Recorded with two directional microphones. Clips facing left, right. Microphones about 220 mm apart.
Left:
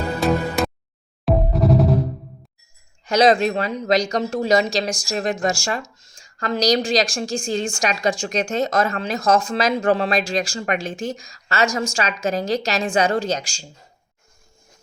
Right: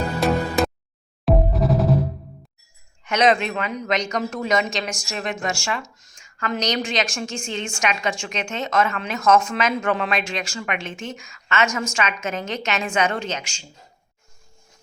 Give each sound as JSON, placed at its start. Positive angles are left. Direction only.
{"t": 0.2, "sound": "music", "side_deg": 0}
{"t": 3.0, "sound": "a woman's voice", "side_deg": 30}